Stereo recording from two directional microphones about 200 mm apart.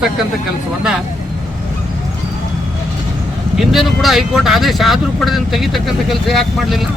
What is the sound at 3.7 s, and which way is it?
Speech, centre (ahead or behind).